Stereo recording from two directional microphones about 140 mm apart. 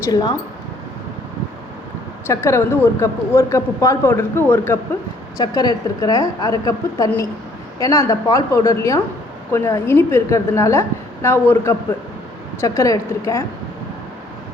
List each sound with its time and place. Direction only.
0.1 s a woman's voice: 30° left (ahead or behind)
2.2 s speech: 20° left (ahead or behind)
5.4 s a woman's voice: 25° left (ahead or behind)